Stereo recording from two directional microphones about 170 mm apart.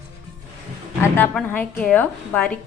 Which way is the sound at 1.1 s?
10° left (ahead or behind).